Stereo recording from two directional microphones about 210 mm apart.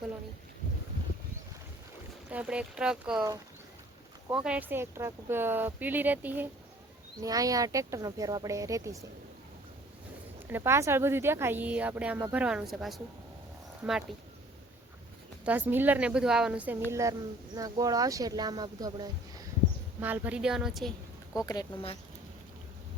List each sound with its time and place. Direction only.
2.3 s a woman's voice: 5° right (ahead or behind)
4.3 s a woman's voice: 5° right (ahead or behind)
10.4 s a woman's voice: 10° right (ahead or behind)
15.4 s a woman's voice: 10° right (ahead or behind)
20.0 s a woman's voice: 10° right (ahead or behind)
21.4 s speech: 20° left (ahead or behind)